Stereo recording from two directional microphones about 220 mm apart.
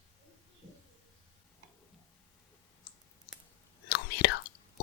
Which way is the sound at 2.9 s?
20° left (ahead or behind).